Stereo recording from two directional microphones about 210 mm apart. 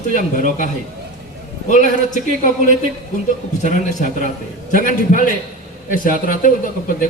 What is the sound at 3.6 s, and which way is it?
Speech, 35° left (ahead or behind).